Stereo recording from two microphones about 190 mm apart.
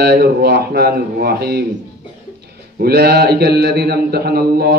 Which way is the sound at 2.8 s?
55° right (ahead or behind).